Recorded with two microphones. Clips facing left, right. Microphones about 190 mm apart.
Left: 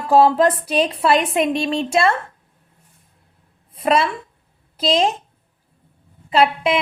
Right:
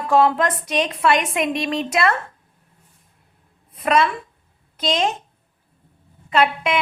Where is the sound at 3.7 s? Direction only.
30° left (ahead or behind).